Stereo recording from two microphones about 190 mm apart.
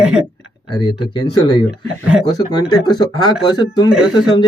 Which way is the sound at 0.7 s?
20° left (ahead or behind).